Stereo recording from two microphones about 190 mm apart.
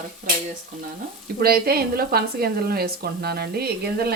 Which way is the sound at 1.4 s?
55° right (ahead or behind).